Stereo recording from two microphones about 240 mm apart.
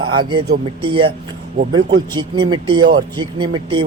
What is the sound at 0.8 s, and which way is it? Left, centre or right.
Speech, right.